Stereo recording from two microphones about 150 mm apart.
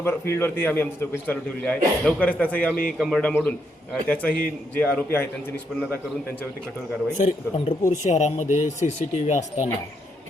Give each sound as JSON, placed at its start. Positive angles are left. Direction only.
{"t": 0.0, "sound": "a man's voice", "side_deg": 15}
{"t": 7.2, "sound": "speech", "side_deg": 45}